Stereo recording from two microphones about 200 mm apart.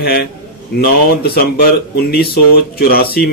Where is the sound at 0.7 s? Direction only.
50° left (ahead or behind).